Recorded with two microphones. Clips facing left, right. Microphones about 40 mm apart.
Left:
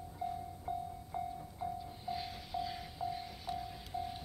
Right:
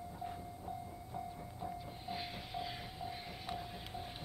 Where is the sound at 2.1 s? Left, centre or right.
Right.